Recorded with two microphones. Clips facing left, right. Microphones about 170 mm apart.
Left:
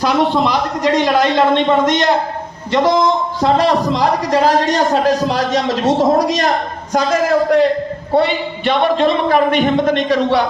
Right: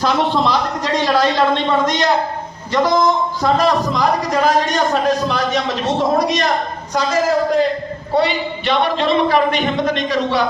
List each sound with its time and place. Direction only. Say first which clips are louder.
0.0 s a man's voice: left 2 dB; 15° left (ahead or behind); by 6.5 s 40° left (ahead or behind)
6.9 s a man's voice: left 2 dB; 60° left (ahead or behind)